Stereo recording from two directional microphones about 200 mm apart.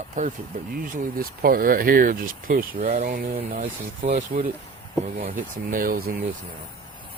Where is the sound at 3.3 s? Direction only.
35° right (ahead or behind).